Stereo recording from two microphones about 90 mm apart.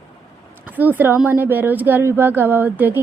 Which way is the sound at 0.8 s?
20° right (ahead or behind).